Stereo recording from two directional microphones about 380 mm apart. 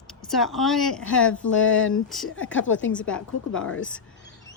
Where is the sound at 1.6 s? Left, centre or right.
Left.